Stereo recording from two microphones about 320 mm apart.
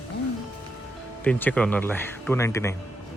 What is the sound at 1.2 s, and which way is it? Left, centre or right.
Speech, centre.